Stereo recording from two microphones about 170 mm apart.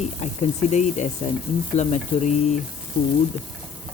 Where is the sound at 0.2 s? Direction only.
45° left (ahead or behind).